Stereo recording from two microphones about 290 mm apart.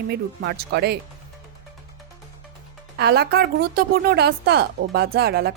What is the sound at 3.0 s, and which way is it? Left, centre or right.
A woman's voice, right.